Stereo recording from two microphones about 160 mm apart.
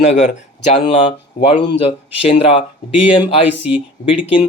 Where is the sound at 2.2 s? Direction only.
35° left (ahead or behind).